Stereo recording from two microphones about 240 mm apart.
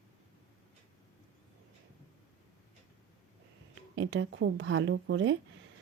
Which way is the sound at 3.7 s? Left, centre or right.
Right.